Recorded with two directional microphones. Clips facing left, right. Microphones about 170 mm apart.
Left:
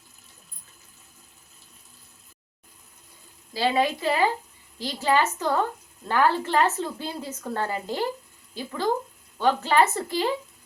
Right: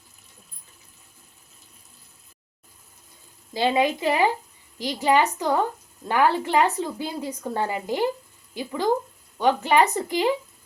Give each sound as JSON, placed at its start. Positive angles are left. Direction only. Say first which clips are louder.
{"t": 3.5, "sound": "a woman's voice", "louder": "right 2 dB", "side_deg": -20}